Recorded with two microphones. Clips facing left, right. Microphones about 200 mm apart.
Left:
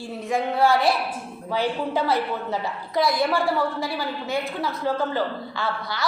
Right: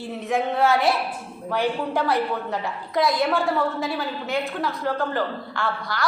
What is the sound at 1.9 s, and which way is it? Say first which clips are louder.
Speech: even; 5° left (ahead or behind).